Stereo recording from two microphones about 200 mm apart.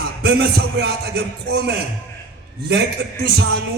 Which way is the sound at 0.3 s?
55° right (ahead or behind).